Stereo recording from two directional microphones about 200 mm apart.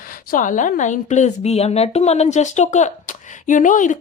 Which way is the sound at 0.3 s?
40° left (ahead or behind).